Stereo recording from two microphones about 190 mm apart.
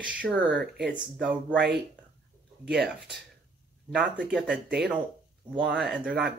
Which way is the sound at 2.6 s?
60° right (ahead or behind).